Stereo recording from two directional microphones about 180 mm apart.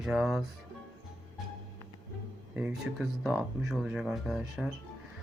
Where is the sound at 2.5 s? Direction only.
5° right (ahead or behind).